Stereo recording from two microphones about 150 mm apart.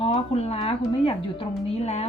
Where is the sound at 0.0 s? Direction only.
45° left (ahead or behind).